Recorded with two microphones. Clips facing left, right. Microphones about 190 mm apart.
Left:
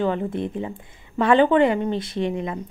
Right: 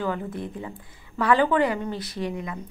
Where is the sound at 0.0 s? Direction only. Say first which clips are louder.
Left 5 dB; 25° left (ahead or behind).